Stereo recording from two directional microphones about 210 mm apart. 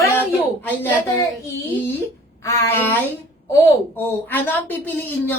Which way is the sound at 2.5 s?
15° left (ahead or behind).